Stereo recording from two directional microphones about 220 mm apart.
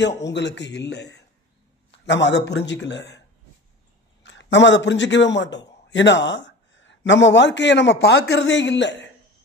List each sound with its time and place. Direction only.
0.0 s a man's voice: 50° left (ahead or behind)
4.2 s a man's voice: 55° left (ahead or behind)
6.3 s a sound: 55° left (ahead or behind)
7.1 s a man's voice: 55° left (ahead or behind)